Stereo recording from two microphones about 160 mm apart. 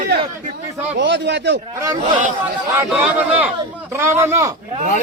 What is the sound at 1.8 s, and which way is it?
Speech, 25° right (ahead or behind).